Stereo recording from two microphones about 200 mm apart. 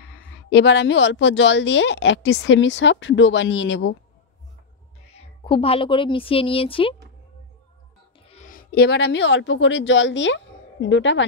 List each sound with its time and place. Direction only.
0.5 s a woman's voice: 60° left (ahead or behind)
5.1 s a woman's voice: 25° left (ahead or behind)
8.7 s a woman's voice: 55° left (ahead or behind)